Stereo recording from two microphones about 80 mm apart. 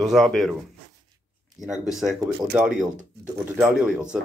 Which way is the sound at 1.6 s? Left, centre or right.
Centre.